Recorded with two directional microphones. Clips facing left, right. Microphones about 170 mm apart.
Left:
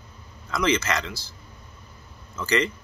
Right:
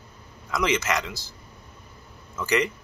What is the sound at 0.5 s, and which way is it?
Speech, 20° right (ahead or behind).